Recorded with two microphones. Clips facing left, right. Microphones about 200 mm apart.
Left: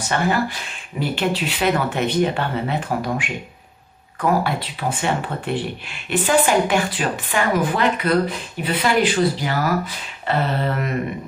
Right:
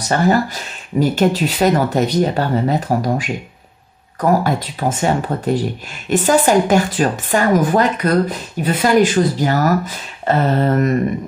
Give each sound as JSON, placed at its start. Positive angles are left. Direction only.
{"t": 0.0, "sound": "speech", "side_deg": -40}